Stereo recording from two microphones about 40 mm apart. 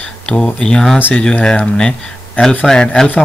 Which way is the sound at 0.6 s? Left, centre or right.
Centre.